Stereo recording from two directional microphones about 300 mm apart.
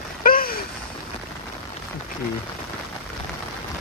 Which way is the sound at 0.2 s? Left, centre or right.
Left.